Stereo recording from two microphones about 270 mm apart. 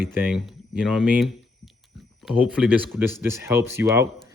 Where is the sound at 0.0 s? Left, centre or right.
Centre.